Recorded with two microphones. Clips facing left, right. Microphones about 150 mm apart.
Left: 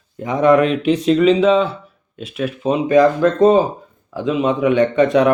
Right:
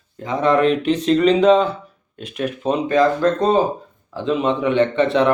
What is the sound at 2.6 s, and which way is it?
Speech, 5° left (ahead or behind).